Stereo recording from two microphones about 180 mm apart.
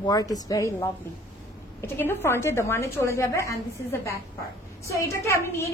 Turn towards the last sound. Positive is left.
turn(degrees=15)  # may be behind; listen again after turning